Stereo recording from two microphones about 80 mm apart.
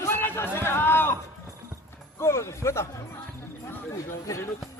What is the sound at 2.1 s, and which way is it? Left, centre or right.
Speech, left.